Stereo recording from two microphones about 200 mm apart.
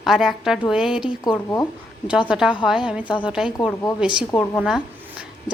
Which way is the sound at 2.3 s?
5° right (ahead or behind).